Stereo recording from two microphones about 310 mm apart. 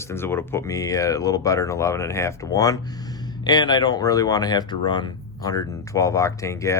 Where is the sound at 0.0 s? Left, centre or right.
Centre.